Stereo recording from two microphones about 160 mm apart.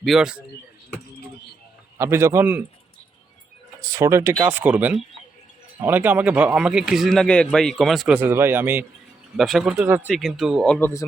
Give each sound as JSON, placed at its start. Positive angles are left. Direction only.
{"t": 0.0, "sound": "speech", "side_deg": 0}
{"t": 2.0, "sound": "speech", "side_deg": -15}
{"t": 3.8, "sound": "speech", "side_deg": -20}
{"t": 9.4, "sound": "speech", "side_deg": 0}